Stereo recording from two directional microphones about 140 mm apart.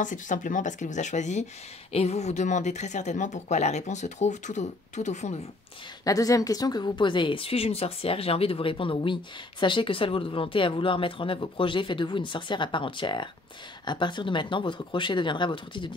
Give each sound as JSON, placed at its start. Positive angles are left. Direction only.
{"t": 0.0, "sound": "speech", "side_deg": 65}
{"t": 6.0, "sound": "a woman's voice", "side_deg": 25}